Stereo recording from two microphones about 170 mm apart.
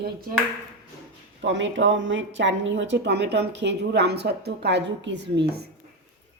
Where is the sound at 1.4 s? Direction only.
90° right.